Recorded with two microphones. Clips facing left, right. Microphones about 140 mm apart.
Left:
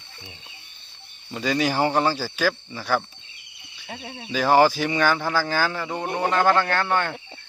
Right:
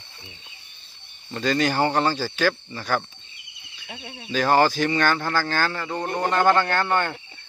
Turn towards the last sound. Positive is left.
turn(degrees=0)  # may be behind; listen again after turning